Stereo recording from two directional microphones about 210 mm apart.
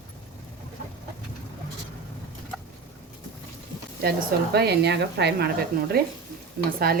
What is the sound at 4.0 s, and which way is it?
Speech, 50° right (ahead or behind).